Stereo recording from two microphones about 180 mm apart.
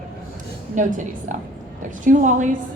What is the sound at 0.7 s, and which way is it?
Speech, 45° right (ahead or behind).